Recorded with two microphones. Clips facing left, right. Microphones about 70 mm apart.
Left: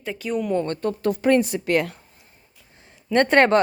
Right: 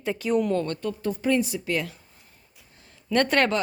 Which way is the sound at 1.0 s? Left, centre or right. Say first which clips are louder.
Left 6 dB; left.